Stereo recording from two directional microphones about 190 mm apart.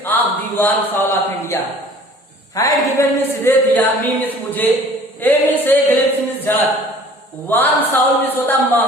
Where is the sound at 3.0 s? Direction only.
15° left (ahead or behind).